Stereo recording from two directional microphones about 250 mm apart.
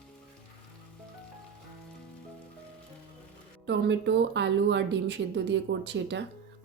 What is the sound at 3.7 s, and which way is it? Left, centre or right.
A woman's voice, right.